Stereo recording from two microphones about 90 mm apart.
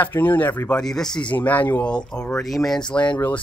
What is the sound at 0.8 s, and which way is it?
Speech, 5° left (ahead or behind).